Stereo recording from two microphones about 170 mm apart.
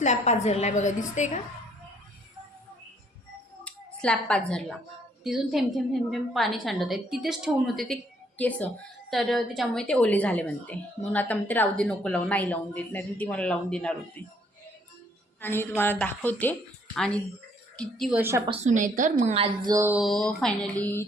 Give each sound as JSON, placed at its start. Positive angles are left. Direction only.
{"t": 0.0, "sound": "a woman's voice", "side_deg": 40}
{"t": 3.6, "sound": "a sound", "side_deg": 5}
{"t": 5.2, "sound": "a woman's voice", "side_deg": 0}
{"t": 15.4, "sound": "a woman's voice", "side_deg": 10}
{"t": 18.2, "sound": "a woman's voice", "side_deg": -15}
{"t": 18.6, "sound": "a woman's voice", "side_deg": -50}
{"t": 19.4, "sound": "speech", "side_deg": -20}
{"t": 19.9, "sound": "a woman's voice", "side_deg": 0}